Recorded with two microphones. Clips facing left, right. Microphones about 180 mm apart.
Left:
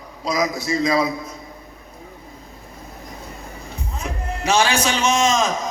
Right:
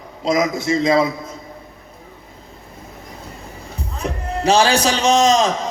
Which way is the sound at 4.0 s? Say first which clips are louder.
Right 5 dB; 35° right (ahead or behind).